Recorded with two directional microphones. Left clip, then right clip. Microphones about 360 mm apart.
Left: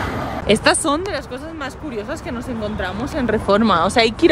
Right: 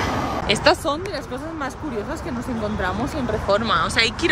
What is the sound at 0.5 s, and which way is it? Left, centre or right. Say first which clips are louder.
Speech: left 6 dB; centre.